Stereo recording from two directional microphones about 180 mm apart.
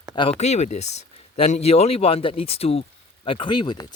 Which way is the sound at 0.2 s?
35° left (ahead or behind).